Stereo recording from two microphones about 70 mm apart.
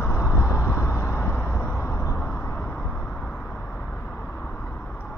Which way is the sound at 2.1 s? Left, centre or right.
Left.